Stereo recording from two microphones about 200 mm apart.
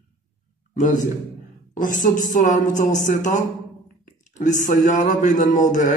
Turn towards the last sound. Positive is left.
turn(degrees=40)  # may be behind; listen again after turning